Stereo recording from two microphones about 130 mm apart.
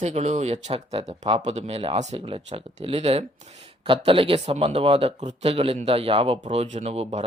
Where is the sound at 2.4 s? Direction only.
45° right (ahead or behind).